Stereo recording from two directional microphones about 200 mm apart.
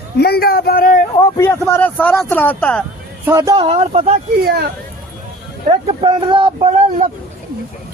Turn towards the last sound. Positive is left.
turn(degrees=-30)  # may be behind; listen again after turning